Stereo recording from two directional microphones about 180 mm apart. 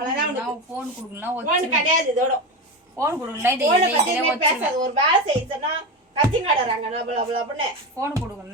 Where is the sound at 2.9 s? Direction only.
15° right (ahead or behind).